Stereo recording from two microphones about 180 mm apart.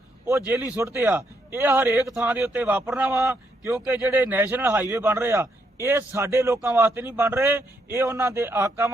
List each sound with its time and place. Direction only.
0.3 s a man's voice: 10° right (ahead or behind)